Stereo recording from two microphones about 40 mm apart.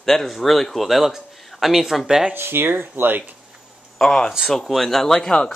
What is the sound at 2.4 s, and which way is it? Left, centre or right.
Speech, right.